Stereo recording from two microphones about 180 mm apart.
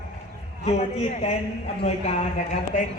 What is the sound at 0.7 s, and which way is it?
Speech, 35° left (ahead or behind).